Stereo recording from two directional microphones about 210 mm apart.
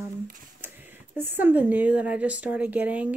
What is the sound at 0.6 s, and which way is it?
Speech, 10° right (ahead or behind).